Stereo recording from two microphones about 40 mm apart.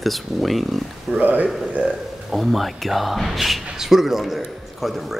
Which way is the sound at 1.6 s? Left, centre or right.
Right.